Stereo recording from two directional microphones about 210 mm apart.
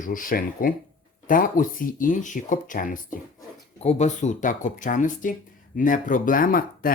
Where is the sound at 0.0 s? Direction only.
40° left (ahead or behind).